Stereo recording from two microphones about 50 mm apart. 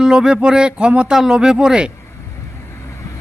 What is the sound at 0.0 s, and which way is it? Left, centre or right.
A man's voice, centre.